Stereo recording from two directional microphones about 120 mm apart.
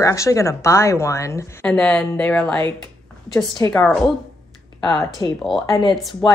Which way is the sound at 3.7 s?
5° left (ahead or behind).